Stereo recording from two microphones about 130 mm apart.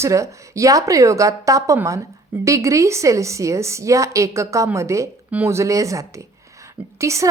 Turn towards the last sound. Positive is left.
turn(degrees=-25)  # may be behind; listen again after turning